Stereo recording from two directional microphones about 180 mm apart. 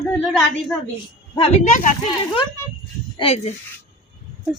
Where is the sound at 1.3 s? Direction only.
30° left (ahead or behind).